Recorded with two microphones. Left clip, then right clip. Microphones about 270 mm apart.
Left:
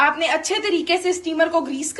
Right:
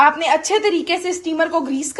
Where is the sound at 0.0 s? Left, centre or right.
Right.